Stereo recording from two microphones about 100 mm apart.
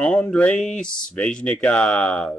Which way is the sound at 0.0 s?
5° left (ahead or behind).